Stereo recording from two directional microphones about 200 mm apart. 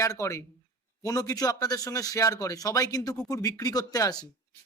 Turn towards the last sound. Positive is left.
turn(degrees=20)  # may be behind; listen again after turning